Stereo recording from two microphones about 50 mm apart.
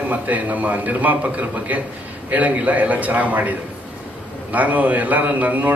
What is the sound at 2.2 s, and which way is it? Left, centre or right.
A man's voice, right.